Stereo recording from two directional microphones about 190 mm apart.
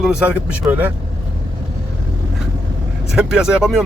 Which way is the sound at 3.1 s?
5° right (ahead or behind).